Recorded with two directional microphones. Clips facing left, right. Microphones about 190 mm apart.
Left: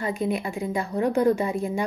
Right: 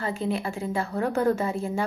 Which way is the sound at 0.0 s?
15° left (ahead or behind).